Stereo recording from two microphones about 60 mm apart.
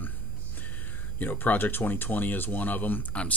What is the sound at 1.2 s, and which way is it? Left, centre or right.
Speech, left.